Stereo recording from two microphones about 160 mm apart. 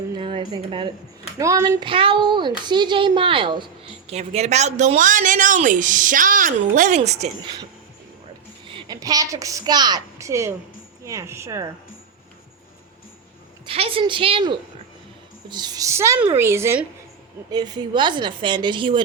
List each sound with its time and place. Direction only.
0.2 s a woman's voice: 30° right (ahead or behind)
4.1 s speech: 40° right (ahead or behind)
8.6 s a woman's voice: 30° right (ahead or behind)
13.7 s a woman's voice: 35° right (ahead or behind)